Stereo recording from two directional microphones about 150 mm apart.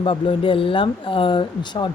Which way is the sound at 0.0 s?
35° left (ahead or behind).